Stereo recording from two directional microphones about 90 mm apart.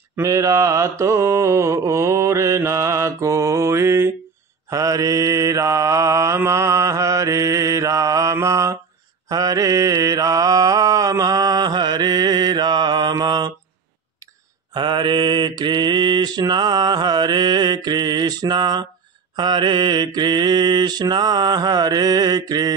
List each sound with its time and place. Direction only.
0.2 s mantra: 35° right (ahead or behind)
4.6 s mantra: 40° right (ahead or behind)
14.7 s mantra: 60° right (ahead or behind)